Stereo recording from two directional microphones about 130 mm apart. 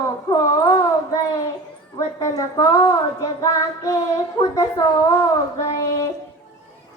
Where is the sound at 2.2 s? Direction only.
25° left (ahead or behind).